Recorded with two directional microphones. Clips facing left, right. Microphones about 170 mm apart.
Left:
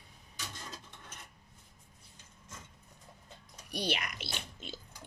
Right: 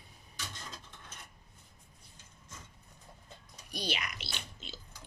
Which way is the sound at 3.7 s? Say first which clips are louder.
Left 3 dB; 60° left (ahead or behind).